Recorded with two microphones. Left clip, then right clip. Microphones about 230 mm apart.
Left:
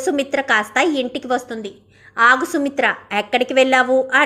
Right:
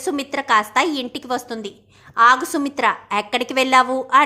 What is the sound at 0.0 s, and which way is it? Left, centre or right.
A woman's voice, centre.